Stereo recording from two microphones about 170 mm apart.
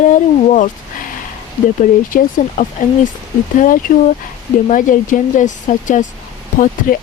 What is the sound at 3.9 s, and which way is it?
Speech, 45° left (ahead or behind).